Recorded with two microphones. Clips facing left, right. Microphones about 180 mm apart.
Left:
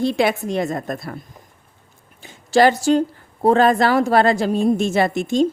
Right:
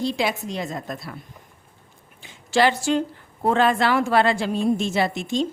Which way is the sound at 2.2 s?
45° left (ahead or behind).